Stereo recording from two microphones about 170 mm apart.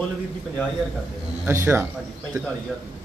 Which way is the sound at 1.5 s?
15° right (ahead or behind).